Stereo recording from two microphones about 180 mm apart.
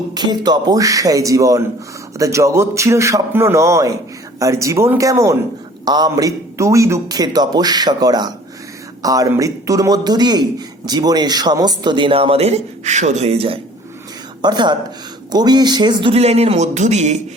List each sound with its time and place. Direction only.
0.1 s a man's voice: 25° right (ahead or behind); by 17.2 s 40° right (ahead or behind)